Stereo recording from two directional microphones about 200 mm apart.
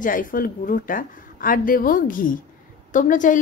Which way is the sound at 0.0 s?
45° left (ahead or behind).